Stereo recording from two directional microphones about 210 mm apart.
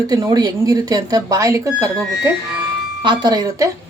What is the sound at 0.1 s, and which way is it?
Speech, 20° right (ahead or behind).